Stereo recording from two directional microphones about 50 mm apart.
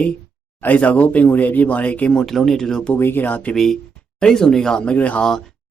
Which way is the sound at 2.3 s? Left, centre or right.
Centre.